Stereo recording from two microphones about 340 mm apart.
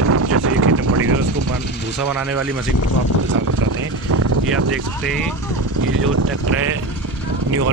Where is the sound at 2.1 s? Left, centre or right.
Centre.